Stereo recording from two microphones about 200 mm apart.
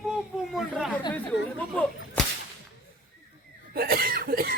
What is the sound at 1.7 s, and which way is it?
Whip, 5° left (ahead or behind).